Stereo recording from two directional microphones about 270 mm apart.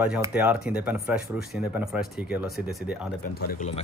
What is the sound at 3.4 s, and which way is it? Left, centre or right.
Speech, left.